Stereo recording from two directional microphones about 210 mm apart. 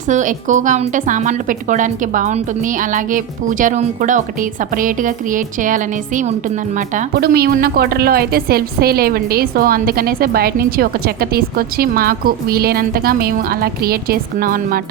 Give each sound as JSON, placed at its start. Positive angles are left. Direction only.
{"t": 0.1, "sound": "a woman's voice", "side_deg": -35}